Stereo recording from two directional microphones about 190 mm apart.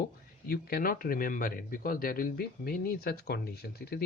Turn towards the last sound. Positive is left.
turn(degrees=55)  # may be behind; listen again after turning